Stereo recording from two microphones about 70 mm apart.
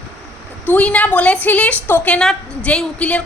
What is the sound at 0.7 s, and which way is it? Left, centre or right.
A woman's voice, centre.